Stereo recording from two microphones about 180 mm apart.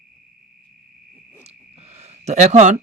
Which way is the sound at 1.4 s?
35° right (ahead or behind).